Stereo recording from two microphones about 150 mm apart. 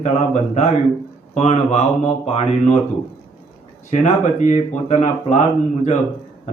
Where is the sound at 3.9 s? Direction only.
55° left (ahead or behind).